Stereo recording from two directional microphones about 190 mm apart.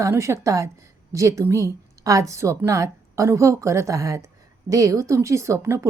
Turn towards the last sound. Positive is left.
turn(degrees=-15)  # may be behind; listen again after turning